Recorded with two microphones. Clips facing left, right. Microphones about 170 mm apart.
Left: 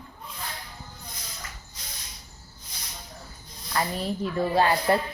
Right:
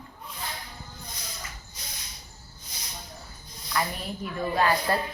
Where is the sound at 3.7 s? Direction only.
30° left (ahead or behind).